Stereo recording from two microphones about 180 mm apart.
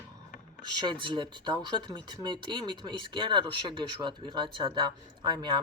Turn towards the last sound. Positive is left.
turn(degrees=-25)  # may be behind; listen again after turning